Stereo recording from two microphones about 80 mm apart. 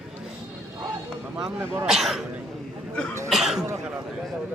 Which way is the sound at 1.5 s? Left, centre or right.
Right.